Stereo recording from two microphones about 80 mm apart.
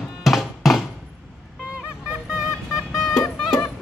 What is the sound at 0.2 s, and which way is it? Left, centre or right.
Music, centre.